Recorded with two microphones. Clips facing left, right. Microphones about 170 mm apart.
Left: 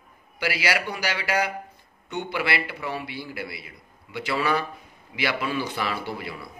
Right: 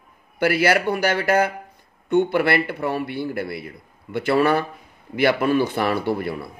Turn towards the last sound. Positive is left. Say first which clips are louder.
# right 9 dB
turn(degrees=-55)  # may be behind; listen again after turning